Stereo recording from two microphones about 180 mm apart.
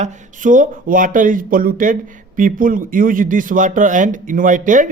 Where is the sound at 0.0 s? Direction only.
45° right (ahead or behind).